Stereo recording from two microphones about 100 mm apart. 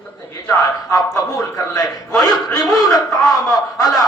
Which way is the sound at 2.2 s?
40° left (ahead or behind).